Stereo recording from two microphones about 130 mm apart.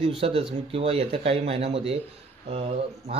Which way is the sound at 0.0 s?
45° right (ahead or behind).